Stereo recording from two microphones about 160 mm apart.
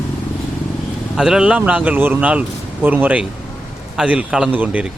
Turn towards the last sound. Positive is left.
turn(degrees=-10)  # may be behind; listen again after turning